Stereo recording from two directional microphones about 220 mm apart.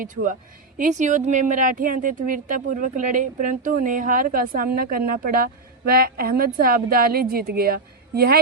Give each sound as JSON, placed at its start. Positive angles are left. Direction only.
{"t": 0.0, "sound": "speech", "side_deg": -35}